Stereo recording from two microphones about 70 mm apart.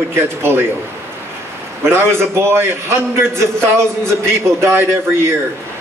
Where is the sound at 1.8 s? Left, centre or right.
Right.